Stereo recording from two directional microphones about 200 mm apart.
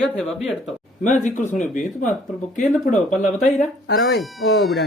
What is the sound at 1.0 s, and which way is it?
A man's voice, 40° left (ahead or behind).